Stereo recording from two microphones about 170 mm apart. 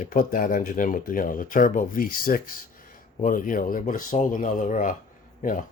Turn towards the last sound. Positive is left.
turn(degrees=50)  # may be behind; listen again after turning